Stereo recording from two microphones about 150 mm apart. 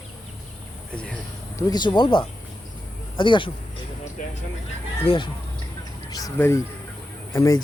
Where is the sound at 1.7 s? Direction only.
30° left (ahead or behind).